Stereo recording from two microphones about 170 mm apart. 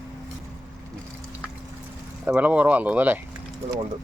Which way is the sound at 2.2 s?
10° right (ahead or behind).